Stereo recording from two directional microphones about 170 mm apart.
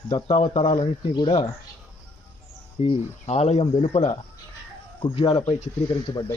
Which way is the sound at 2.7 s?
35° left (ahead or behind).